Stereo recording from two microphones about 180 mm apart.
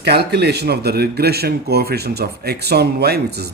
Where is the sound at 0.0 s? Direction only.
65° right (ahead or behind).